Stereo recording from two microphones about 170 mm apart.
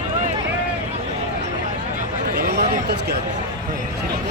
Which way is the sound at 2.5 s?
70° right (ahead or behind).